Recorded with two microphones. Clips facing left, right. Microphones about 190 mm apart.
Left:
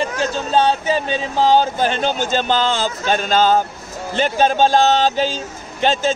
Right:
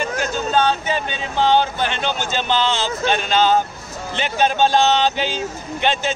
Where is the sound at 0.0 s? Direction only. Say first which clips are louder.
Left 2 dB; 30° left (ahead or behind).